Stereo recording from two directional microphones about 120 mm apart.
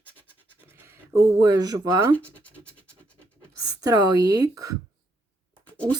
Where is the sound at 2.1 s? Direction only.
10° left (ahead or behind).